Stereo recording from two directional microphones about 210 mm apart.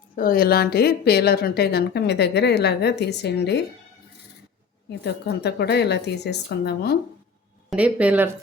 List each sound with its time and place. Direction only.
0.2 s speech: 45° left (ahead or behind)
4.9 s speech: 50° left (ahead or behind)
7.7 s speech: 5° right (ahead or behind)